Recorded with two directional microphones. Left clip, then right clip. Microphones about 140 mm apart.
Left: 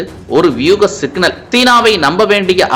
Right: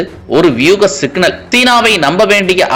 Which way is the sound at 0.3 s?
5° right (ahead or behind).